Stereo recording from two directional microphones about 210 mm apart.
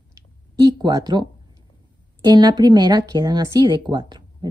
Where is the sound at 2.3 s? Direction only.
20° right (ahead or behind).